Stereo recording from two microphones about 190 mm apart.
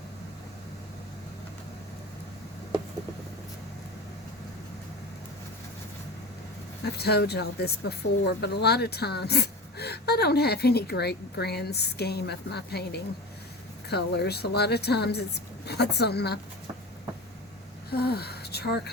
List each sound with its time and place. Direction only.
6.8 s speech: 60° left (ahead or behind)
17.9 s speech: 55° left (ahead or behind)